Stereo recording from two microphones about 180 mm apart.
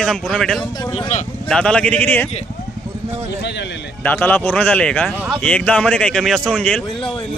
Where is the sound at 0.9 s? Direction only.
35° left (ahead or behind).